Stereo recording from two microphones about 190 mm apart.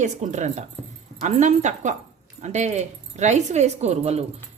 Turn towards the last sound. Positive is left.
turn(degrees=-35)  # may be behind; listen again after turning